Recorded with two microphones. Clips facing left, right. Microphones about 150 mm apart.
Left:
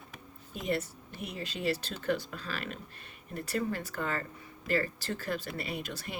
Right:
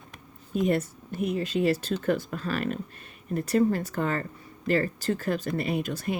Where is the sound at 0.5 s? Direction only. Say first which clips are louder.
Right 8 dB; 50° right (ahead or behind).